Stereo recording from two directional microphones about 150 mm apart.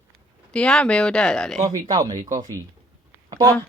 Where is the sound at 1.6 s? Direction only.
25° right (ahead or behind).